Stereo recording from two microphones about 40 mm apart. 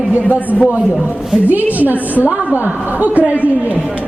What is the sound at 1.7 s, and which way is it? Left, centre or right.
A man's voice, right.